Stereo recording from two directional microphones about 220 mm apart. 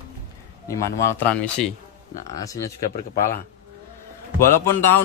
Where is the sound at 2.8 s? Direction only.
35° left (ahead or behind).